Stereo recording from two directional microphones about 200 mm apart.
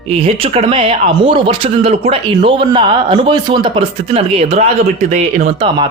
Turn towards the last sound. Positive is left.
turn(degrees=-30)  # may be behind; listen again after turning